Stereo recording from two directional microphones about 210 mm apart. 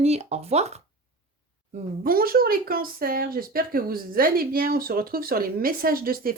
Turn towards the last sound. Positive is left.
turn(degrees=-45)  # may be behind; listen again after turning